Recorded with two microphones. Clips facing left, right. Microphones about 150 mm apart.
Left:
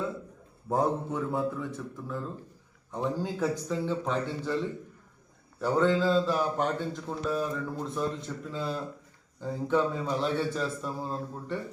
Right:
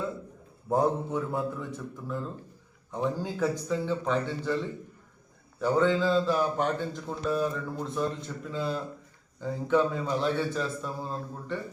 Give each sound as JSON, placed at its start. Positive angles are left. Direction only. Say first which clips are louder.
{"t": 0.7, "sound": "a man's voice", "louder": "right 2 dB", "side_deg": 0}